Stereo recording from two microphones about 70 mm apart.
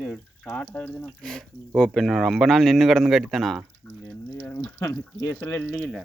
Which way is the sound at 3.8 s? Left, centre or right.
Left.